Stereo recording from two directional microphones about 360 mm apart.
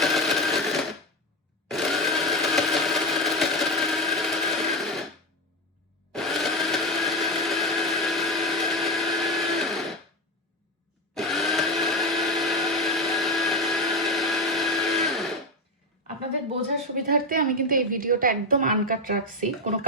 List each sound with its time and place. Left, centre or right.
0.0 s a sound: centre
1.6 s blender: centre
4.8 s a sound: centre
6.1 s blender: centre
11.1 s blender: centre
16.5 s speech: right